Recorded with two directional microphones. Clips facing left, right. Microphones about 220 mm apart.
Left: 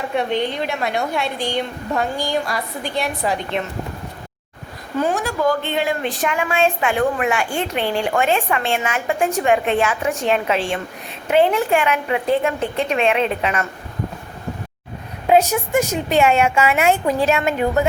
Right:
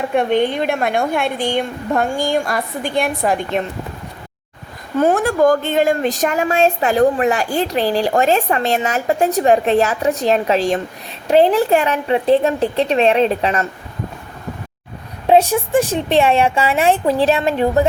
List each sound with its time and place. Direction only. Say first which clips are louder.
0.1 s a woman's voice: right 5 dB; 50° right (ahead or behind)
4.9 s a woman's voice: right 6 dB; 55° right (ahead or behind); by 13.7 s 35° right (ahead or behind)
15.3 s a woman's voice: right 3 dB; 30° right (ahead or behind)